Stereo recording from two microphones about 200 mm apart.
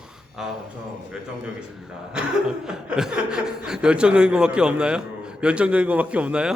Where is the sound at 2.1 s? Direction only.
5° right (ahead or behind).